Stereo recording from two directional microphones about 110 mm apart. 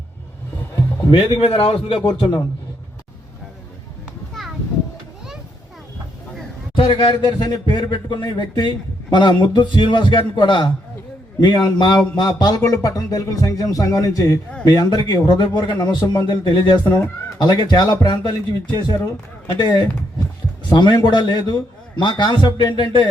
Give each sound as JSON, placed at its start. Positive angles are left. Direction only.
{"t": 1.1, "sound": "a man's voice", "side_deg": 60}
{"t": 2.0, "sound": "a man's voice", "side_deg": 45}
{"t": 6.7, "sound": "a man's voice", "side_deg": 50}